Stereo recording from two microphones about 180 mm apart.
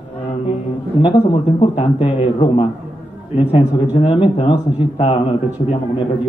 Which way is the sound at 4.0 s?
30° left (ahead or behind).